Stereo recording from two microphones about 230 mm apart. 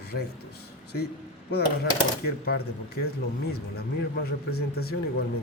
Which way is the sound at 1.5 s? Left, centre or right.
Left.